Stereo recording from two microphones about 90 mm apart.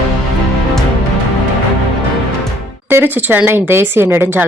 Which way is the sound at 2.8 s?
25° right (ahead or behind).